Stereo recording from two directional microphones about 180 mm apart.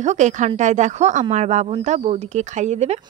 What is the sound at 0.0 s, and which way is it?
Speech, 40° right (ahead or behind).